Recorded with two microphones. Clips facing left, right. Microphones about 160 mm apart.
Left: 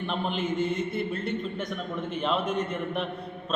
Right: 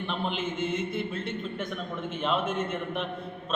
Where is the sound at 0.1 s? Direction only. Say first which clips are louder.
Left 3 dB; centre (ahead or behind).